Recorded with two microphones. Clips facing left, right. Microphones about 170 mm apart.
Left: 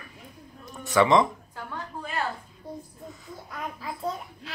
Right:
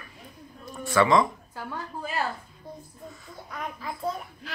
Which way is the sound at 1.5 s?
5° right (ahead or behind).